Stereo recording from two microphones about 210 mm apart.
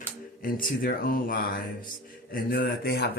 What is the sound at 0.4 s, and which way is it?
Speech, 40° left (ahead or behind).